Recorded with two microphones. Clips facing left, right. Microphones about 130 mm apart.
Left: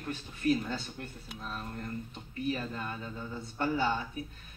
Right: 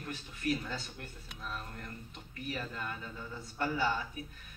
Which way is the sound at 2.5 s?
25° left (ahead or behind).